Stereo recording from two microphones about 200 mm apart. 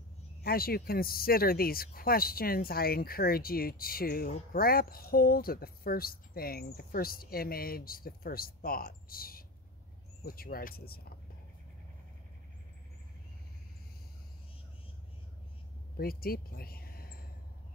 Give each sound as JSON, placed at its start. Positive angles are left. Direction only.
{"t": 0.4, "sound": "speech", "side_deg": 50}
{"t": 16.0, "sound": "speech", "side_deg": 50}